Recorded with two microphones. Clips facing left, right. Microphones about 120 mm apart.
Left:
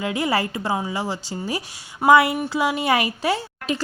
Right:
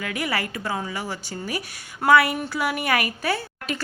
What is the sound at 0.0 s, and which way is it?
A woman's voice, 25° left (ahead or behind).